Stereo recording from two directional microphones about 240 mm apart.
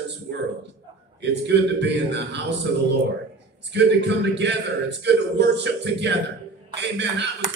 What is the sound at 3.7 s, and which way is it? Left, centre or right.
A man's voice, right.